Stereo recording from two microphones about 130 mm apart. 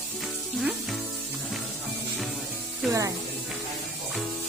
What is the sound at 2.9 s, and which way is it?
Music, 25° right (ahead or behind).